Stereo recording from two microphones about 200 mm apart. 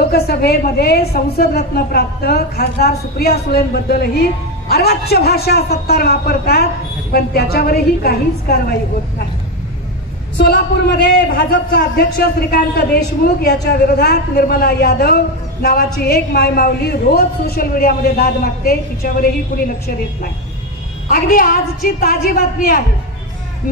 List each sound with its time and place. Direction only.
0.1 s a woman's voice: 50° left (ahead or behind)
10.3 s a woman's voice: 55° left (ahead or behind)
21.1 s a woman's voice: 45° left (ahead or behind)